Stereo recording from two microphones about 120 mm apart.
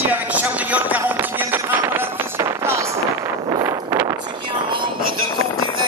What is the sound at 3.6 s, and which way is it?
Wind noise, 25° right (ahead or behind).